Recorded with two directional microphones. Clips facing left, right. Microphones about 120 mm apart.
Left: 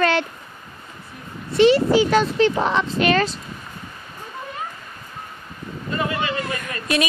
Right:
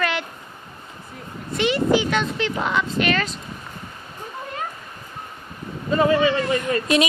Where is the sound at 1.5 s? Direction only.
35° left (ahead or behind).